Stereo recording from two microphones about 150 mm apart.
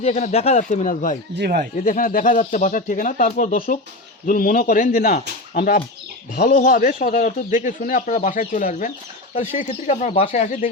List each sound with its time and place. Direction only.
0.0 s speech: 50° left (ahead or behind)
1.4 s speech: 80° right
1.8 s a man's voice: 65° left (ahead or behind)